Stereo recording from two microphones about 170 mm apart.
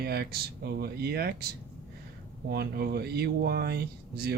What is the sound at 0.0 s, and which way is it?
Speech, 65° right (ahead or behind).